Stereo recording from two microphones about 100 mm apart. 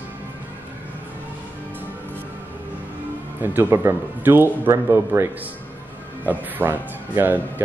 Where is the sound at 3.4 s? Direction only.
25° right (ahead or behind).